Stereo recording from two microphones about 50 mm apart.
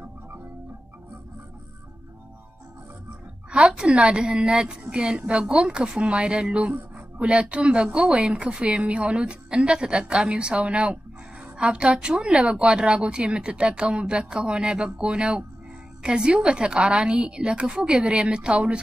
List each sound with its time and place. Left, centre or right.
3.5 s speech: centre